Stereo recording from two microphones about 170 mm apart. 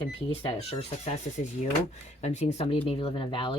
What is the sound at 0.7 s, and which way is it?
Speech, 40° left (ahead or behind).